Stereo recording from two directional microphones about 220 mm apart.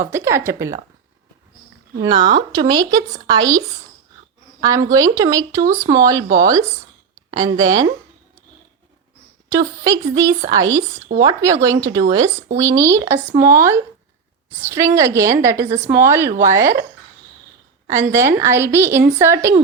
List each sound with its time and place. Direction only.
0.0 s speech: 10° right (ahead or behind)
2.0 s speech: 20° right (ahead or behind)
4.6 s speech: 15° right (ahead or behind)
9.6 s speech: 15° right (ahead or behind)
17.8 s speech: 15° right (ahead or behind)